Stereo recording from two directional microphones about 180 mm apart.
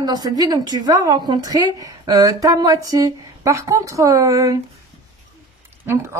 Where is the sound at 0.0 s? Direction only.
20° right (ahead or behind).